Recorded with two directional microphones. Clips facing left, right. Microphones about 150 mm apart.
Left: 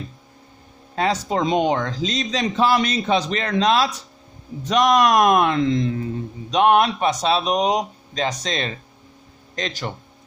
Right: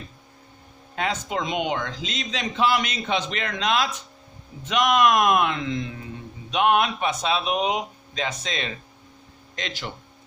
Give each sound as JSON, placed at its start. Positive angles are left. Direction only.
{"t": 0.9, "sound": "speech", "side_deg": 35}